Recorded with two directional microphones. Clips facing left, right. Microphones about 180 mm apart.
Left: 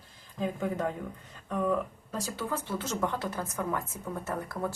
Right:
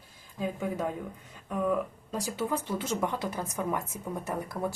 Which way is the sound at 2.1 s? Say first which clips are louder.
Right 4 dB; 15° right (ahead or behind).